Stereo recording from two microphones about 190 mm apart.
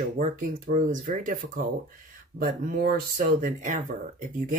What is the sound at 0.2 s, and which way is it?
Speech, 45° right (ahead or behind).